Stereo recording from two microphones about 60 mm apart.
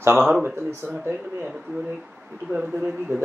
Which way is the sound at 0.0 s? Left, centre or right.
Right.